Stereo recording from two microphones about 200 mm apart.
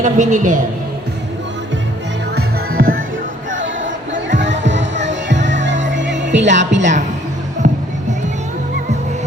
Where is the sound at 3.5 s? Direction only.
70° right (ahead or behind).